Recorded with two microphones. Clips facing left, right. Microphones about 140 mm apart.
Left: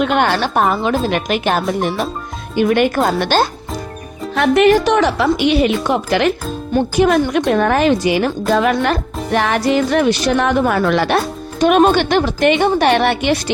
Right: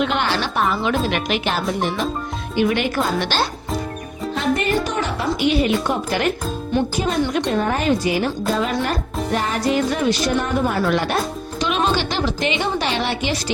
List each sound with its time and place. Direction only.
0.0 s speech: 55° left (ahead or behind)
4.4 s a woman's voice: 75° left (ahead or behind)
7.0 s a woman's voice: 70° left (ahead or behind); by 11.2 s 90° left
11.6 s a woman's voice: 50° left (ahead or behind)